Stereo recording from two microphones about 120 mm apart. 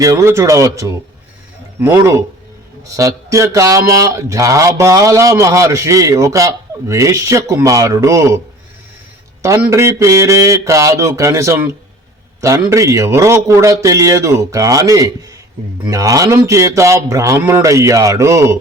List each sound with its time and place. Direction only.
0.0 s speech: 25° right (ahead or behind)
9.6 s speech: 20° right (ahead or behind)